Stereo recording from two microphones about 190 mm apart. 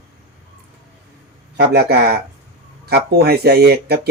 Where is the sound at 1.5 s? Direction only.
55° right (ahead or behind).